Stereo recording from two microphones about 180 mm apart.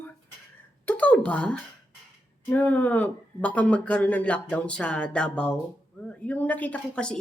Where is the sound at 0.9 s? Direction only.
10° left (ahead or behind).